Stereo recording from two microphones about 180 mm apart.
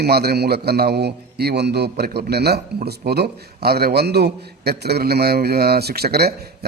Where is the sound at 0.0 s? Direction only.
60° right (ahead or behind).